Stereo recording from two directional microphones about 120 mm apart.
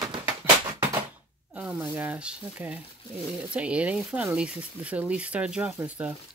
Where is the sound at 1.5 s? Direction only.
5° right (ahead or behind).